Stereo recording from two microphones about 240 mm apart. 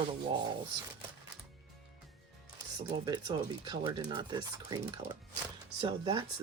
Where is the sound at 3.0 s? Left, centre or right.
Centre.